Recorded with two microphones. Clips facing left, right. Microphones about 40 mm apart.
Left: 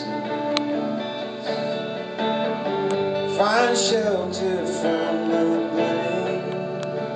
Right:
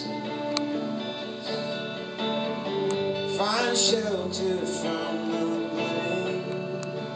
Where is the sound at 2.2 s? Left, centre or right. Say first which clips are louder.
Left 6 dB; centre.